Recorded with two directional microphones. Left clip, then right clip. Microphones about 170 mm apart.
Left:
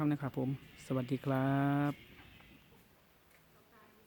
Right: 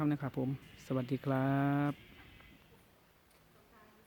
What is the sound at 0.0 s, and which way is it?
Speech, 5° left (ahead or behind).